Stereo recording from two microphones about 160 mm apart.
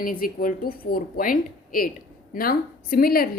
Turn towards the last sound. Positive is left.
turn(degrees=70)  # may be behind; listen again after turning